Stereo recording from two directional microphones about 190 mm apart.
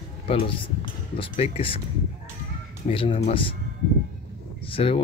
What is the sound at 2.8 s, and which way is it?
Speech, 30° left (ahead or behind).